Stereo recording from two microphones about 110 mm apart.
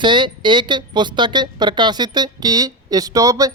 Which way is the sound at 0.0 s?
45° right (ahead or behind).